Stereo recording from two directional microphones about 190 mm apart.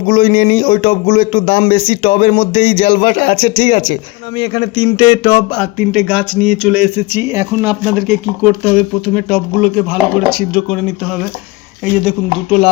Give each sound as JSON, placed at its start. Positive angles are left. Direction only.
{"t": 0.1, "sound": "speech", "side_deg": 35}
{"t": 5.8, "sound": "speech", "side_deg": 0}
{"t": 12.0, "sound": "speech", "side_deg": 0}